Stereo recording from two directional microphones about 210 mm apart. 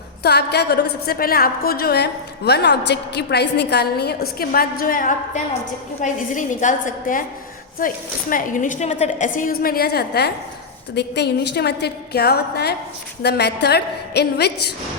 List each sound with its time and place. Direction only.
0.2 s a woman's voice: 50° left (ahead or behind)